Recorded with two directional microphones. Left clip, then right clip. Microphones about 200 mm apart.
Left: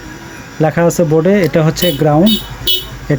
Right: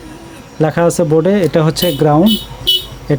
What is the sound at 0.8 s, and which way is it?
Speech, 20° right (ahead or behind).